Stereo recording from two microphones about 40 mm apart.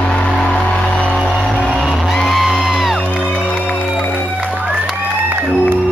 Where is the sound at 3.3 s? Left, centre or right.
Left.